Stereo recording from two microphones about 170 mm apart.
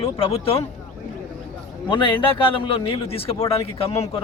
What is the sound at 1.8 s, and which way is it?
Speech, 30° left (ahead or behind).